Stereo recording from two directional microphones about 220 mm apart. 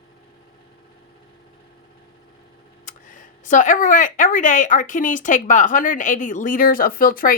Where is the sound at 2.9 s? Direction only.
35° left (ahead or behind).